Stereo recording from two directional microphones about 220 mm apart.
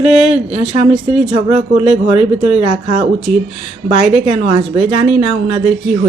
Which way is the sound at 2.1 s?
5° right (ahead or behind).